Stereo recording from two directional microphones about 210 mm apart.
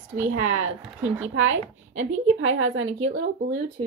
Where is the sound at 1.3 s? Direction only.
70° right (ahead or behind).